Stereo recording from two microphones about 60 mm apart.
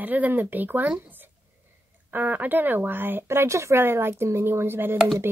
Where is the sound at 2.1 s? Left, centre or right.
Right.